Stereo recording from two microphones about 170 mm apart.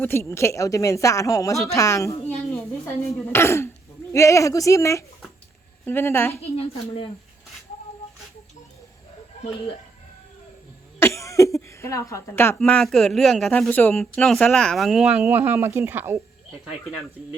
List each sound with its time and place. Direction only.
0.0 s a woman's voice: 15° left (ahead or behind)
2.1 s a woman's voice: 40° left (ahead or behind)
2.8 s a woman's voice: 15° left (ahead or behind)
6.3 s a woman's voice: 35° left (ahead or behind)
11.0 s cough: 15° left (ahead or behind)
11.8 s a woman's voice: 20° left (ahead or behind)
12.5 s speech: 5° left (ahead or behind); by 16.2 s 10° right (ahead or behind)